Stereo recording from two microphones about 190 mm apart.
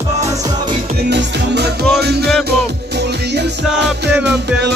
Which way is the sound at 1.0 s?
65° right (ahead or behind).